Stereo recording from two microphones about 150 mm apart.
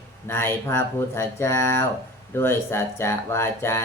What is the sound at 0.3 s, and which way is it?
Speech, 15° left (ahead or behind).